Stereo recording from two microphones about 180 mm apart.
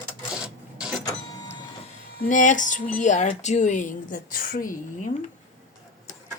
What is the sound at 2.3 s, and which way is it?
Speech, 45° left (ahead or behind).